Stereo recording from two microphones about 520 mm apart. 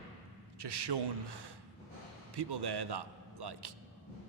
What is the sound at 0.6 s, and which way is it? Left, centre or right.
A man's voice, right.